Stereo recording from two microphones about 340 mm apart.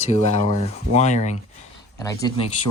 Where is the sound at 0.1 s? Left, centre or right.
Centre.